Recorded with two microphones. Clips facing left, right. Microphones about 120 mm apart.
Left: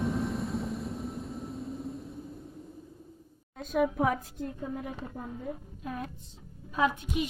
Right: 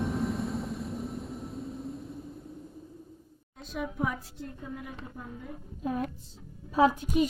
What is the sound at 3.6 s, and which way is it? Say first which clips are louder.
Speech: left 6 dB; 55° left (ahead or behind).